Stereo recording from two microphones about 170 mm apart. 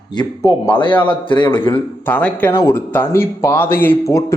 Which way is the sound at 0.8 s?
30° left (ahead or behind).